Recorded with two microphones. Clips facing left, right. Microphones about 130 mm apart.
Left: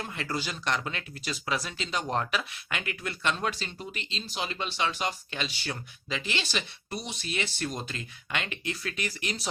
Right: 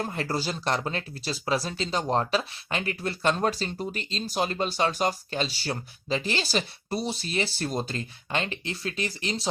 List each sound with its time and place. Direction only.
0.0 s speech: 40° right (ahead or behind)